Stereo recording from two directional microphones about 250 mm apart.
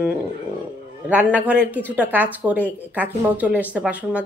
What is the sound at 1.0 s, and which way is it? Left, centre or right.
A woman's voice, centre.